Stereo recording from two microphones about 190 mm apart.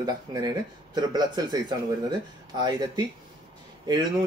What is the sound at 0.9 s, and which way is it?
Speech, 20° right (ahead or behind).